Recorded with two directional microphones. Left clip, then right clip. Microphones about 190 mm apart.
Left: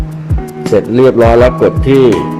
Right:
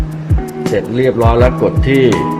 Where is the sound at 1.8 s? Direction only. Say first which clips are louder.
Left 4 dB; 15° left (ahead or behind).